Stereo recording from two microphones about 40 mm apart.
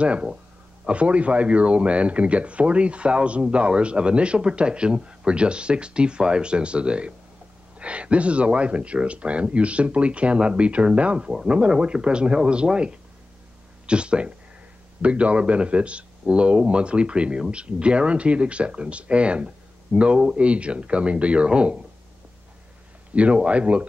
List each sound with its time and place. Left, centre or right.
0.0 s speech: right
23.1 s speech: right